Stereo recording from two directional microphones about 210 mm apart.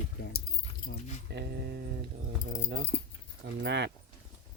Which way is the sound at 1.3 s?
55° right (ahead or behind).